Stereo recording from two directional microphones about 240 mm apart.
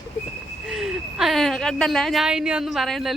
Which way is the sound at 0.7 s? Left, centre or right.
Centre.